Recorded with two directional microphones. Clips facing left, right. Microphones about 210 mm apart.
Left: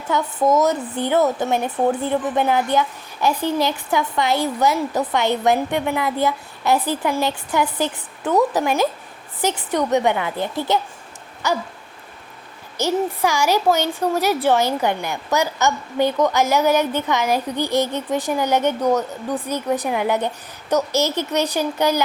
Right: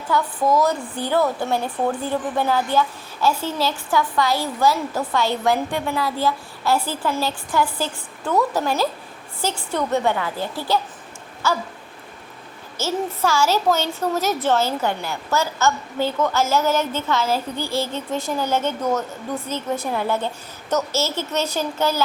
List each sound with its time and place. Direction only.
0.1 s a woman's voice: 25° left (ahead or behind)
12.7 s a child's voice: 15° left (ahead or behind)